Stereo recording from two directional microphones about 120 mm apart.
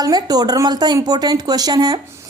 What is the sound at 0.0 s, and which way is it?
Speech, 35° right (ahead or behind).